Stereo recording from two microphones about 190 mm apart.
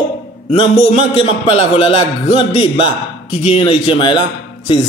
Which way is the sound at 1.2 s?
30° left (ahead or behind).